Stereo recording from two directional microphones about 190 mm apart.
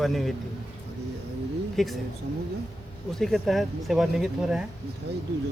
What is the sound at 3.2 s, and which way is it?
Speech, centre (ahead or behind).